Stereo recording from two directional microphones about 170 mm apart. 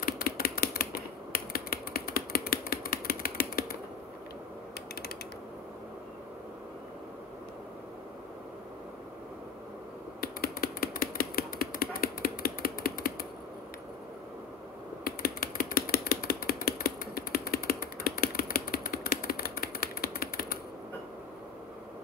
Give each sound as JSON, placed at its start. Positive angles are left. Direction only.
{"t": 0.0, "sound": "typing", "side_deg": 60}
{"t": 10.2, "sound": "typewriter", "side_deg": 60}
{"t": 15.0, "sound": "typing", "side_deg": 60}